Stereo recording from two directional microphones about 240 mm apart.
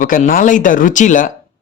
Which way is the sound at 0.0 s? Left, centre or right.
Left.